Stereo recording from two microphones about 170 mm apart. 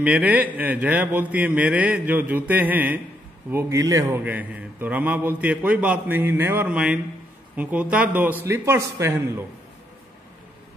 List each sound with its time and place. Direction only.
0.0 s a man's voice: 10° right (ahead or behind)